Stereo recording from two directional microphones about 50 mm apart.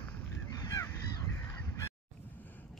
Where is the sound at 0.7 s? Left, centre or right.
Left.